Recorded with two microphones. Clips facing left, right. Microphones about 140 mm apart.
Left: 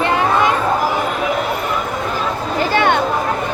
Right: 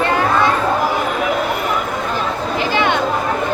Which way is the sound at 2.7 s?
50° left (ahead or behind).